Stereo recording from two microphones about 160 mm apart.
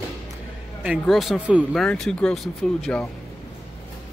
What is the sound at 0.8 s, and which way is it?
Speech, centre (ahead or behind).